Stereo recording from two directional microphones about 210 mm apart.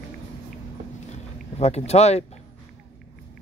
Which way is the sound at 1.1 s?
30° left (ahead or behind).